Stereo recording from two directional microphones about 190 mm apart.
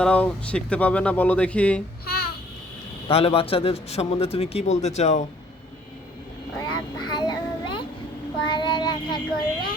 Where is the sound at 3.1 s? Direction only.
30° left (ahead or behind).